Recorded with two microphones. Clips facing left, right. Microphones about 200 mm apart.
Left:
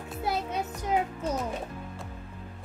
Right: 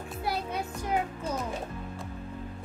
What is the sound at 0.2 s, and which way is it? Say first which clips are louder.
Music: left 2 dB; 20° left (ahead or behind).